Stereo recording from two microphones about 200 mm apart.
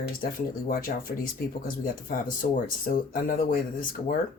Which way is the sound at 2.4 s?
40° left (ahead or behind).